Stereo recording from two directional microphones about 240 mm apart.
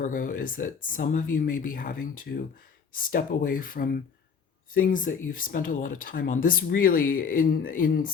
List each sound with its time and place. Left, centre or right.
0.0 s speech: left